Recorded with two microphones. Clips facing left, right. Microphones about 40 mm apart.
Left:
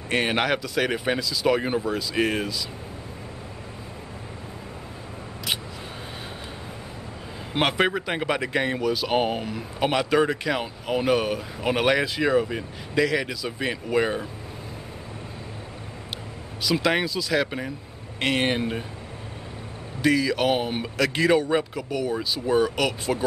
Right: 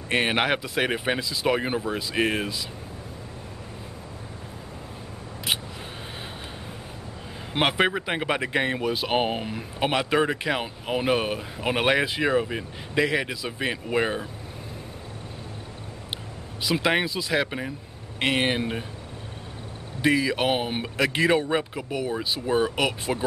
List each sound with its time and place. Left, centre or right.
0.1 s speech: centre
7.5 s speech: centre
8.4 s speech: right
12.4 s speech: centre
13.0 s speech: right
16.6 s speech: centre
17.5 s speech: centre
20.0 s speech: right